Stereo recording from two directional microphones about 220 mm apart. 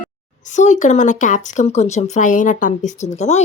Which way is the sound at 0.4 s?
35° left (ahead or behind).